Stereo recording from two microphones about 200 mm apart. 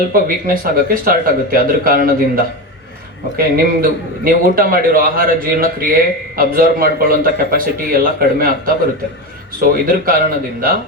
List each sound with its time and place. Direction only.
0.1 s a man's voice: 45° right (ahead or behind)